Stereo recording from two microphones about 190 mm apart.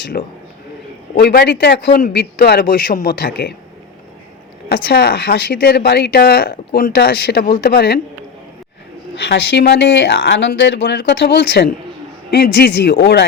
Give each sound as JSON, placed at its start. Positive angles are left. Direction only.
{"t": 0.1, "sound": "a man's voice", "side_deg": 45}
{"t": 4.7, "sound": "speech", "side_deg": 55}
{"t": 9.2, "sound": "speech", "side_deg": 60}